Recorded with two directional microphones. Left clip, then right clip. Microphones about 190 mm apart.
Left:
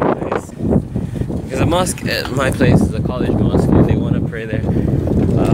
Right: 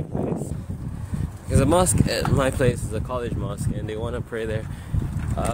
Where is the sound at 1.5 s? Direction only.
5° right (ahead or behind).